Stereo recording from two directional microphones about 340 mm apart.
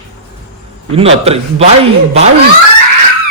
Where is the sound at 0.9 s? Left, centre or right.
Centre.